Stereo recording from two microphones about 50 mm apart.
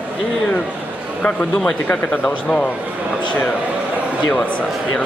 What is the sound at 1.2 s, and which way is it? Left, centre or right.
Speech, left.